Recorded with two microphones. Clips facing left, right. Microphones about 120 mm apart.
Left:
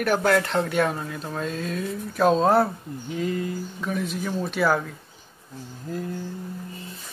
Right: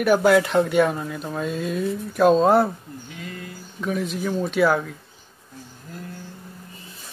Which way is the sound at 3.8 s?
Centre (ahead or behind).